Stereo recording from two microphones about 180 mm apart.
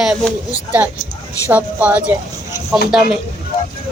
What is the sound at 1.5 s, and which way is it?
Speech, 10° right (ahead or behind).